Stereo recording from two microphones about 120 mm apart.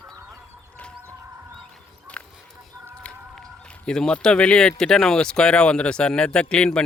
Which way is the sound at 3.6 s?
10° left (ahead or behind).